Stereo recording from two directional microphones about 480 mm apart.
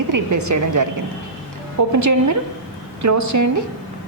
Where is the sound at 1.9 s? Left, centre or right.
Right.